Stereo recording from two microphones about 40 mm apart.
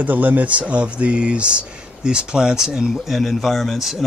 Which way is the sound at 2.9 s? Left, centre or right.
Centre.